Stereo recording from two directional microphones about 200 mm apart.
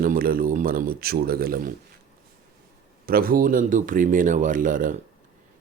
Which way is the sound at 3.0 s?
45° right (ahead or behind).